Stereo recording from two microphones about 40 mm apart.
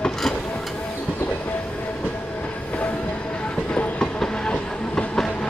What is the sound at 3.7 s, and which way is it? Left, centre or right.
Train, left.